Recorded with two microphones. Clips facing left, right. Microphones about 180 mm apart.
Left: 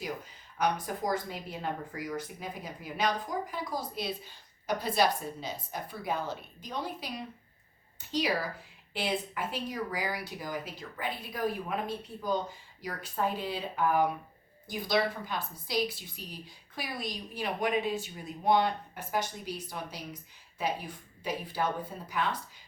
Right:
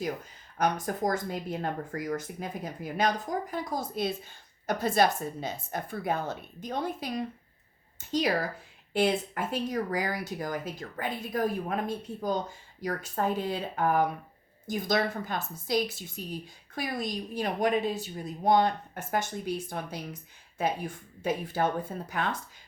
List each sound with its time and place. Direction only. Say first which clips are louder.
0.6 s speech: right 3 dB; 45° right (ahead or behind)
8.1 s speech: right 3 dB; 50° right (ahead or behind)